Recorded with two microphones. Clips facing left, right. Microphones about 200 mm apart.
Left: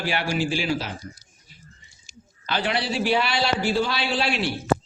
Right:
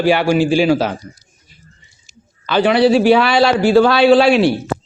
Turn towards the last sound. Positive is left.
turn(degrees=-75)  # may be behind; listen again after turning